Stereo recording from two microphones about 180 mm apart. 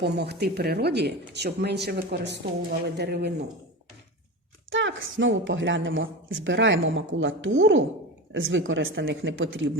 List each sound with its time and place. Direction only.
0.0 s speech: 65° right (ahead or behind)
4.7 s a woman's voice: 90° right